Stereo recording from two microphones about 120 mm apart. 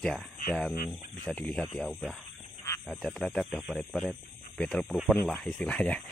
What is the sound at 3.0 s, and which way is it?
Speech, 5° left (ahead or behind).